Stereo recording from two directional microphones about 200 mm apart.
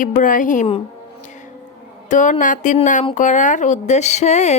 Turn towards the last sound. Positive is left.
turn(degrees=35)  # may be behind; listen again after turning